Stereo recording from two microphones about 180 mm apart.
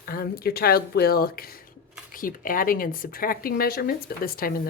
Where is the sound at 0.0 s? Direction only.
55° left (ahead or behind).